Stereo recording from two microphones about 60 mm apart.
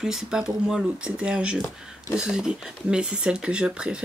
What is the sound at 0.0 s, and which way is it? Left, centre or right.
Speech, centre.